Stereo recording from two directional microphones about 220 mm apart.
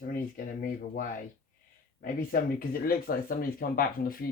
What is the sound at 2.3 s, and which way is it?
Speech, 40° left (ahead or behind).